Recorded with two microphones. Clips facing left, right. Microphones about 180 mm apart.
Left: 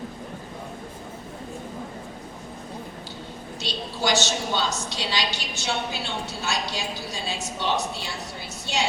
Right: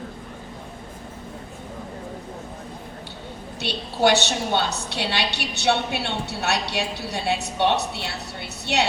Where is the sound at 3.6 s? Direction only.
60° right (ahead or behind).